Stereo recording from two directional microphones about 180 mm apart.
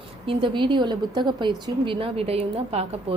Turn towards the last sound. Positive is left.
turn(degrees=-35)  # may be behind; listen again after turning